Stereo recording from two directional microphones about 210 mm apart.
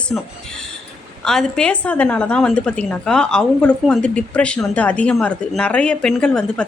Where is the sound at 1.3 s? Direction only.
5° left (ahead or behind).